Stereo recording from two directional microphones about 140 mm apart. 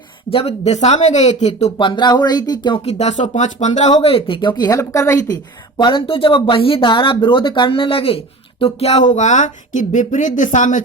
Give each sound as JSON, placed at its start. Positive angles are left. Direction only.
{"t": 0.3, "sound": "speech", "side_deg": 45}
{"t": 1.8, "sound": "a woman's voice", "side_deg": 35}
{"t": 5.7, "sound": "speech", "side_deg": 35}